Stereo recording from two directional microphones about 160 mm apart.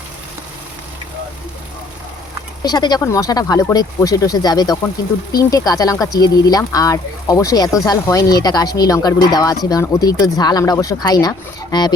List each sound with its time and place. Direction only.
2.6 s speech: 25° left (ahead or behind)